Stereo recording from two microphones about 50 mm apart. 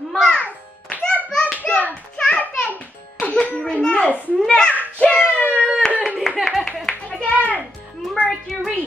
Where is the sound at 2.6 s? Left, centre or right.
Left.